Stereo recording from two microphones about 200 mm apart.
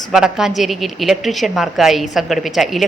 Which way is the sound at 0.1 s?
5° right (ahead or behind).